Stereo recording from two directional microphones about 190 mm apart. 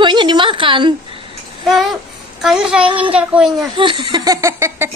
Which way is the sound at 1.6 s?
Centre (ahead or behind).